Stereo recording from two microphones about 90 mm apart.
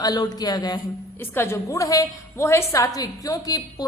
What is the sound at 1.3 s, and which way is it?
A woman's voice, 30° left (ahead or behind).